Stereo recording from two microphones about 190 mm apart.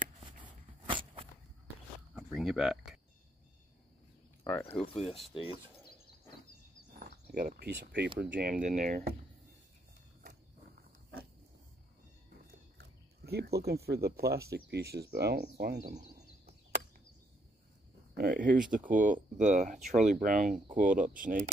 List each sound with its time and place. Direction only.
0.2 s a sound: 25° right (ahead or behind)
2.1 s speech: centre (ahead or behind)
4.5 s speech: 10° left (ahead or behind)
4.9 s speech: 30° left (ahead or behind)
7.3 s speech: 50° right (ahead or behind)
8.2 s speech: 55° right (ahead or behind)
12.7 s speech: 60° right (ahead or behind)
18.1 s speech: 50° right (ahead or behind)